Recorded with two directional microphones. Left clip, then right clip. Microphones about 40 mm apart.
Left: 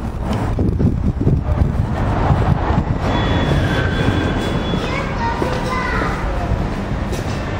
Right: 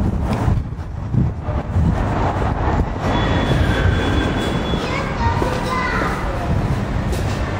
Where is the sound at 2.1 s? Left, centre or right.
Left.